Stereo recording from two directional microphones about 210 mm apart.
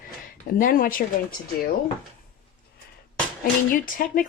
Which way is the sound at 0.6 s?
40° left (ahead or behind).